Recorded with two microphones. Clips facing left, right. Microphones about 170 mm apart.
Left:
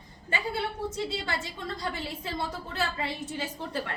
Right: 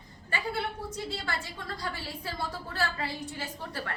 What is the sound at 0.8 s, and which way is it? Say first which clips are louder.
A woman's voice: left 4 dB; 20° left (ahead or behind).